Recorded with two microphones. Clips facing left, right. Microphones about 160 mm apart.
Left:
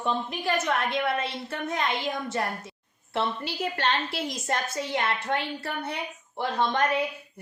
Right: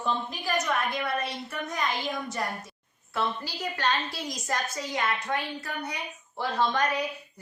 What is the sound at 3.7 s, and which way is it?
Speech, 25° left (ahead or behind).